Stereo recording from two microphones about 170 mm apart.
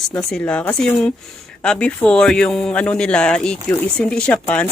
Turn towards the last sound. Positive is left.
turn(degrees=5)  # may be behind; listen again after turning